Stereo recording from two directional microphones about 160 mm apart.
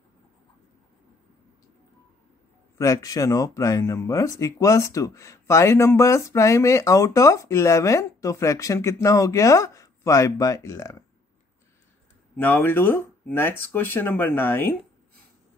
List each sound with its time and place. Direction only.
2.8 s speech: 20° left (ahead or behind)
12.4 s speech: 10° left (ahead or behind)